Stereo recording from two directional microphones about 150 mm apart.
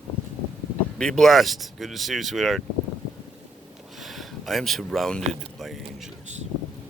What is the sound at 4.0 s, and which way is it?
Speech, centre (ahead or behind).